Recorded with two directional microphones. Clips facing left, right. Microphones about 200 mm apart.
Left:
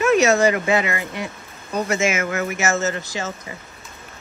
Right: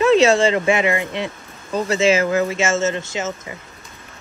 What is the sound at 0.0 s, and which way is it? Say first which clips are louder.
Speech: right 2 dB; 30° right (ahead or behind).